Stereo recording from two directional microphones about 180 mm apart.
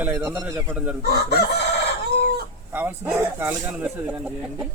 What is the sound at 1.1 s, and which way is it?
Chicken, 65° left (ahead or behind).